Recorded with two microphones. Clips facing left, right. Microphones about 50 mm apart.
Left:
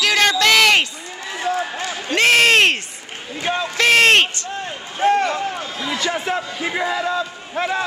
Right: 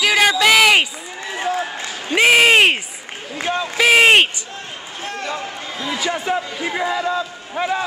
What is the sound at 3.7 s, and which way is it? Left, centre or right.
Speech, centre.